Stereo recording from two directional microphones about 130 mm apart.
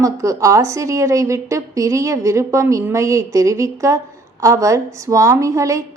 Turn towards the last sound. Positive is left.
turn(degrees=-25)  # may be behind; listen again after turning